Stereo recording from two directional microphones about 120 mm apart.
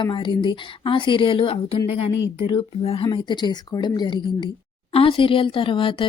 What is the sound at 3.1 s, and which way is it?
A woman's voice, 40° left (ahead or behind).